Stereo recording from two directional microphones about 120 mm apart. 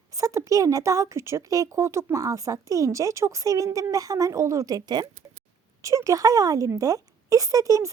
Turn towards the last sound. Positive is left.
turn(degrees=-30)  # may be behind; listen again after turning